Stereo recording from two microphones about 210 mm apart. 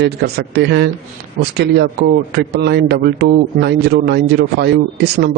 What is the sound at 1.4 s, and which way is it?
Speech, 40° right (ahead or behind).